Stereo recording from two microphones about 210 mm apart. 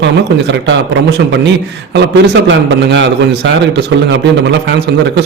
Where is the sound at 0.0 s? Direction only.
60° right (ahead or behind).